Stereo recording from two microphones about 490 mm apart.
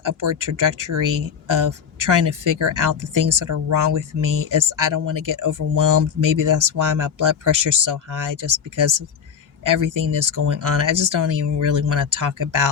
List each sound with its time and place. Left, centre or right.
0.0 s speech: right